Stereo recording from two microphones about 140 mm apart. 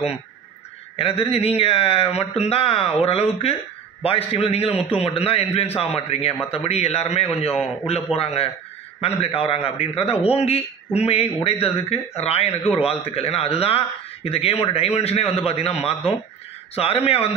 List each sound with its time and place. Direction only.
0.9 s a man's voice: 45° left (ahead or behind)